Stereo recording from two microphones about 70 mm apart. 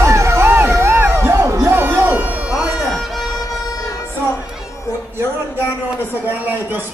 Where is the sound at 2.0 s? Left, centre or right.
Right.